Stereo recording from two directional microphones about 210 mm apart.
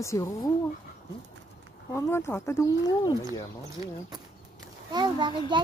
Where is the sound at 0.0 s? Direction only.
15° left (ahead or behind).